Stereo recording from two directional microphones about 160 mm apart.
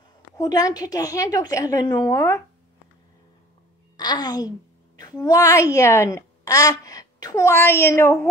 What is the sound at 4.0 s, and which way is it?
A woman's voice, 25° left (ahead or behind).